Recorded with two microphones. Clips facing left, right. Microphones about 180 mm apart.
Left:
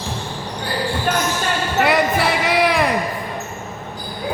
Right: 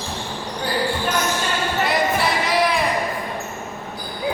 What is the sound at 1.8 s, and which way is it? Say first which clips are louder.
Basketball bounce: left 4 dB; 60° left (ahead or behind).